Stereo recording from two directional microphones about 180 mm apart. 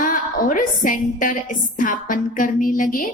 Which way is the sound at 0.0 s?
50° left (ahead or behind).